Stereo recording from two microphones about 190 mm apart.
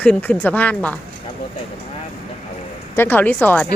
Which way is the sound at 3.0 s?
10° left (ahead or behind).